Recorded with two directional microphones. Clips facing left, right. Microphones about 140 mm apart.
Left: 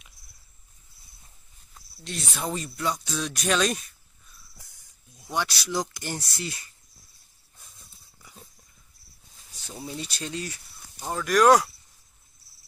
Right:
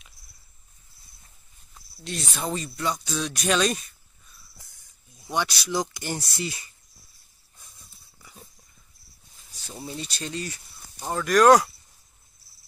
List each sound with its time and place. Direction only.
1.7 s speech: centre (ahead or behind)
5.3 s speech: centre (ahead or behind)
9.8 s speech: 10° left (ahead or behind)